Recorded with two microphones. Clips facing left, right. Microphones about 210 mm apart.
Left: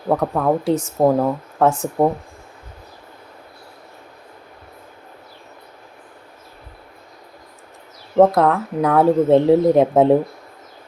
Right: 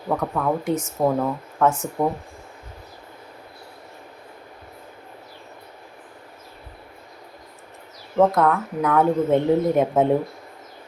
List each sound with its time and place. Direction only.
0.1 s speech: 40° left (ahead or behind)
8.4 s speech: 35° left (ahead or behind)